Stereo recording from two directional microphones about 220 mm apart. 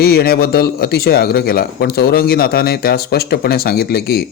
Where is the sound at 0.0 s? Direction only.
45° left (ahead or behind).